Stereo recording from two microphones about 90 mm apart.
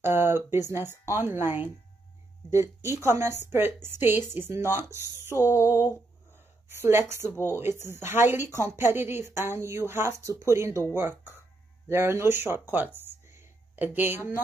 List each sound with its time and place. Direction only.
0.0 s a woman's voice: 25° right (ahead or behind)